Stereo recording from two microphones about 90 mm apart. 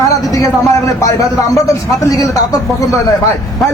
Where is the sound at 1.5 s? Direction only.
40° left (ahead or behind).